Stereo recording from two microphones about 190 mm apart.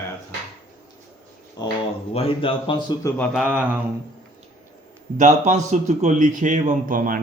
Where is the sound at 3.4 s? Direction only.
10° right (ahead or behind).